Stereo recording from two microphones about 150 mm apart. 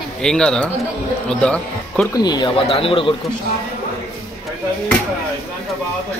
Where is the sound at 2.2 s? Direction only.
30° left (ahead or behind).